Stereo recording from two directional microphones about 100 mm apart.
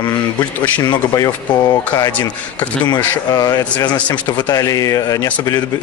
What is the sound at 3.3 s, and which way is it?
A man's voice, 40° left (ahead or behind).